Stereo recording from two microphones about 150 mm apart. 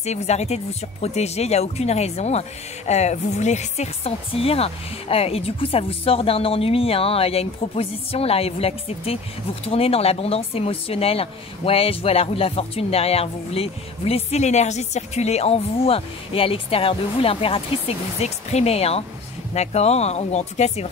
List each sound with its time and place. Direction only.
0.0 s speech: 50° left (ahead or behind)